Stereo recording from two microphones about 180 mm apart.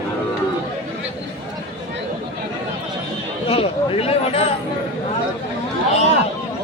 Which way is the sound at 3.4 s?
30° left (ahead or behind).